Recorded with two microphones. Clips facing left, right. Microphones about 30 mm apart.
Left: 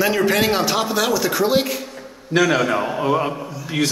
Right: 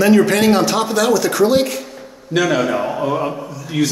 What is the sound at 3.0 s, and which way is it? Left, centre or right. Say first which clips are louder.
Speech: left 2 dB; left.